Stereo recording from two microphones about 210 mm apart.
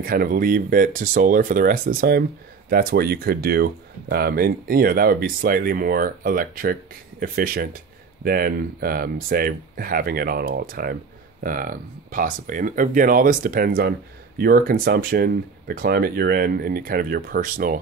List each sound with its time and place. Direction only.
0.0 s speech: 45° right (ahead or behind)